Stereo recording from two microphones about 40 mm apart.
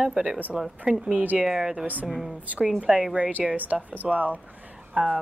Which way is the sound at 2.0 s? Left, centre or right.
Centre.